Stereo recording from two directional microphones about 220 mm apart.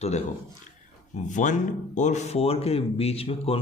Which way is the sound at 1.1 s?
35° left (ahead or behind).